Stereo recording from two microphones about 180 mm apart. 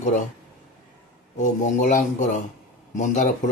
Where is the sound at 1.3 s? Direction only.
40° left (ahead or behind).